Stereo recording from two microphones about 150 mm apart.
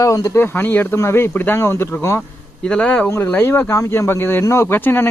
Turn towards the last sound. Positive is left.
turn(degrees=15)  # may be behind; listen again after turning